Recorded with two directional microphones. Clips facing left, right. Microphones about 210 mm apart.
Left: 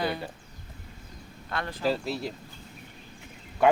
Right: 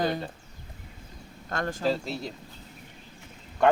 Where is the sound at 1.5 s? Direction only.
45° right (ahead or behind).